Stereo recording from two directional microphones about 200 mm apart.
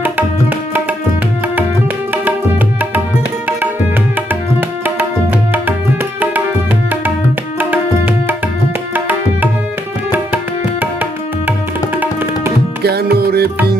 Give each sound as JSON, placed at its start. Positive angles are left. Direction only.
{"t": 7.6, "sound": "tabla", "side_deg": -10}
{"t": 10.1, "sound": "tabla", "side_deg": -10}
{"t": 11.9, "sound": "music", "side_deg": -10}
{"t": 12.8, "sound": "music", "side_deg": -55}